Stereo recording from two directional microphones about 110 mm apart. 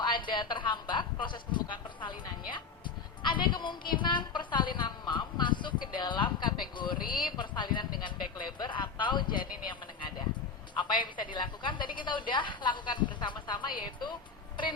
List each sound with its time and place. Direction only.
0.0 s a woman's voice: 45° left (ahead or behind)